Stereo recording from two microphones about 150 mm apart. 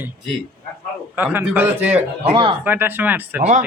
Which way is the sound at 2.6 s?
15° right (ahead or behind).